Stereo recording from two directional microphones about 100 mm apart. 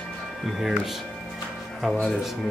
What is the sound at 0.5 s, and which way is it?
Speech, centre (ahead or behind).